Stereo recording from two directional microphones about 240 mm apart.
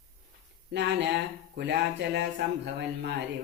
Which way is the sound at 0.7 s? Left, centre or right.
Right.